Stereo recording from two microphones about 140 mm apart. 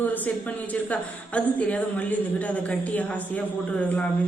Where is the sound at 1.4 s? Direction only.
10° left (ahead or behind).